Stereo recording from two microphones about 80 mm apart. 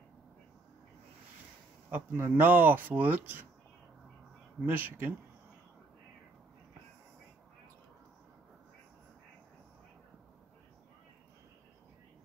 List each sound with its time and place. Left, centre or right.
1.9 s speech: right
4.6 s speech: right